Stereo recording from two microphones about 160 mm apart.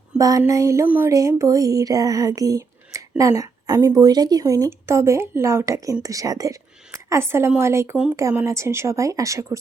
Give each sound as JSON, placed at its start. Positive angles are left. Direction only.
{"t": 0.2, "sound": "a woman's voice", "side_deg": -20}